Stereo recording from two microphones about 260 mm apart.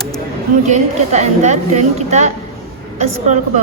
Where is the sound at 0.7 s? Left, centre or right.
Right.